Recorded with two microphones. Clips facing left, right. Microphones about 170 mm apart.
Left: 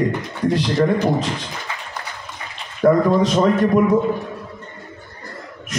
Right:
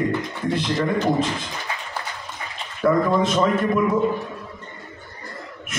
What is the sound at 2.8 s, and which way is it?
A man's voice, 40° left (ahead or behind).